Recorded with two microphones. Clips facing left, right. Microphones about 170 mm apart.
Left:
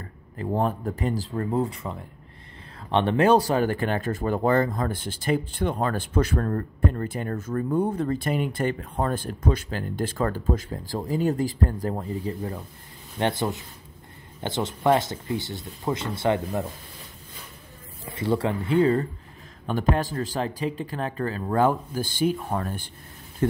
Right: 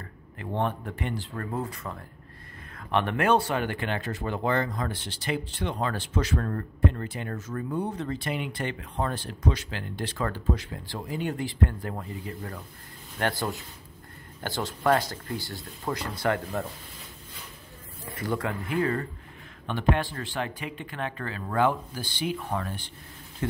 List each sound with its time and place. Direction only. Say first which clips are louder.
0.0 s speech: left 6 dB; 35° left (ahead or behind)
1.3 s speech: left 7 dB; 25° left (ahead or behind); by 6.4 s 50° left (ahead or behind)
6.4 s speech: left 2 dB; 35° left (ahead or behind)
12.4 s speech: left 6 dB; 20° left (ahead or behind)
18.0 s speech: left 5 dB; 25° left (ahead or behind)
19.6 s speech: left 2 dB; 40° left (ahead or behind)